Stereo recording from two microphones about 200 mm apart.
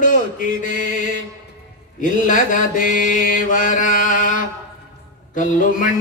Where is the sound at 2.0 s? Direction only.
40° left (ahead or behind).